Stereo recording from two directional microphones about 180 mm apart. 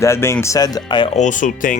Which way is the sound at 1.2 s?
45° left (ahead or behind).